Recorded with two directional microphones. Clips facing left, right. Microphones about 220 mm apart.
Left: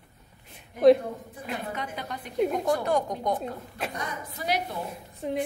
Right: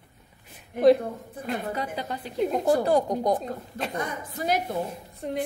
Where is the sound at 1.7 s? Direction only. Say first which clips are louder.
Right 4 dB; 30° right (ahead or behind).